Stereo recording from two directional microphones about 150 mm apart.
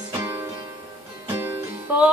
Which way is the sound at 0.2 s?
20° right (ahead or behind).